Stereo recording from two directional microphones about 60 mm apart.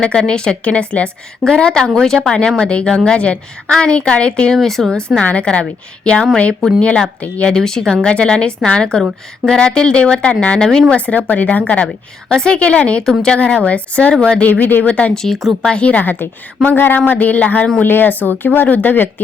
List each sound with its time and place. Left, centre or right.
0.0 s a woman's voice: centre
4.5 s speech: centre
5.2 s a woman's voice: left
6.5 s speech: centre
6.8 s a woman's voice: centre
7.5 s speech: centre; by 11.6 s left
12.3 s a woman's voice: centre
15.1 s a woman's voice: centre; by 16.1 s left
16.6 s a woman's voice: left